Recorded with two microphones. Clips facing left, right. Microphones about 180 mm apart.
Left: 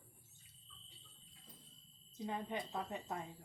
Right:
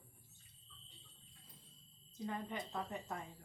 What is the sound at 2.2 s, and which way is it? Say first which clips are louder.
A woman's voice: left 1 dB; 20° left (ahead or behind).